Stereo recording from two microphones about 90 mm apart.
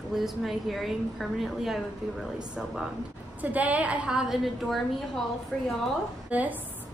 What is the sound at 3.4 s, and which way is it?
A woman's voice, 15° right (ahead or behind).